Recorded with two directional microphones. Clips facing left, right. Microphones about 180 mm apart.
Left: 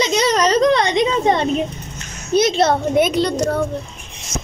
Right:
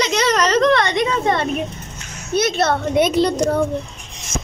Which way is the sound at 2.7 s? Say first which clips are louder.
Left 1 dB; centre (ahead or behind).